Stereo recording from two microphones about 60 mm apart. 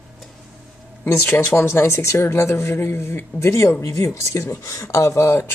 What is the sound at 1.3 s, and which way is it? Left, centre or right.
Speech, left.